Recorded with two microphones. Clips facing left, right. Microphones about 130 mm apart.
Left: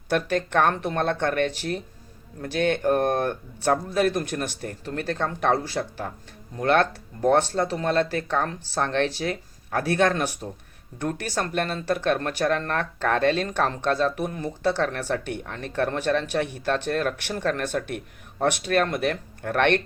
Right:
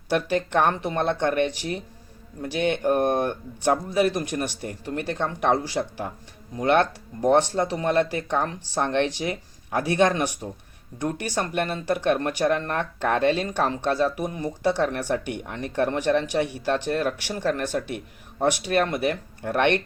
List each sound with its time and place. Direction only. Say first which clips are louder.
0.1 s speech: right 1 dB; 15° right (ahead or behind)